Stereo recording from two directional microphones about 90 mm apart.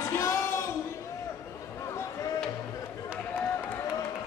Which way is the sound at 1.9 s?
35° left (ahead or behind).